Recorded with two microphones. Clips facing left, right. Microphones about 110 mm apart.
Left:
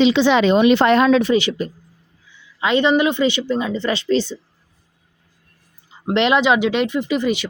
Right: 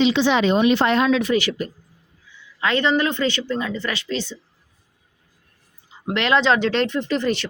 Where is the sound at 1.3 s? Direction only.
20° left (ahead or behind).